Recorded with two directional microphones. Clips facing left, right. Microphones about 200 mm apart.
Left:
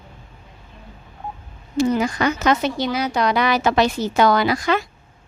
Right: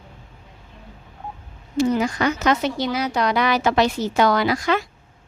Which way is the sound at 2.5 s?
25° left (ahead or behind).